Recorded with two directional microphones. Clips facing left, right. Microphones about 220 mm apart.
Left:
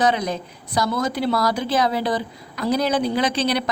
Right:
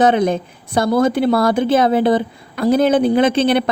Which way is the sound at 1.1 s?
55° right (ahead or behind).